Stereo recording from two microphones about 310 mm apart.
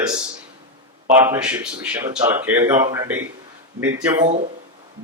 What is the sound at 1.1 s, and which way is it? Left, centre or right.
Speech, centre.